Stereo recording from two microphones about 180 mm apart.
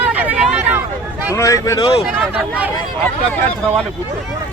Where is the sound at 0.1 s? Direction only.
10° right (ahead or behind).